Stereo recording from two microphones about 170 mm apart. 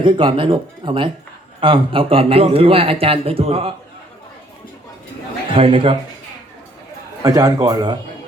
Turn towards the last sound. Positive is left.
turn(degrees=-25)  # may be behind; listen again after turning